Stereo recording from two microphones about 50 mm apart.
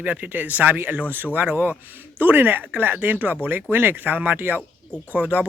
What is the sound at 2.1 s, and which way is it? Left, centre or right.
Speech, right.